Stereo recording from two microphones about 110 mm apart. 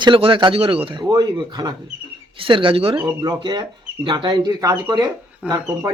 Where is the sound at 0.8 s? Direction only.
45° right (ahead or behind).